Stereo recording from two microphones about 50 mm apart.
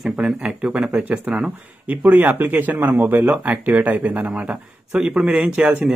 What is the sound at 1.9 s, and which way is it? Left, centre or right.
Speech, right.